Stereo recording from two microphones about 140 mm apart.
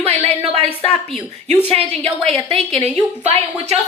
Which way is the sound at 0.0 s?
45° right (ahead or behind).